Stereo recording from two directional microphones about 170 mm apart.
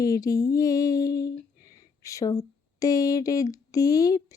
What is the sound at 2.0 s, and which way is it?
Speech, 20° left (ahead or behind).